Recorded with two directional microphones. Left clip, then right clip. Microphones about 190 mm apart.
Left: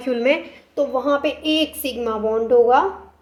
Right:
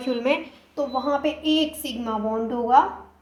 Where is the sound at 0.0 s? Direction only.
30° left (ahead or behind).